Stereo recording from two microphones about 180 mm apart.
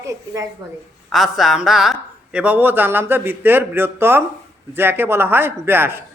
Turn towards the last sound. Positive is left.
turn(degrees=-10)  # may be behind; listen again after turning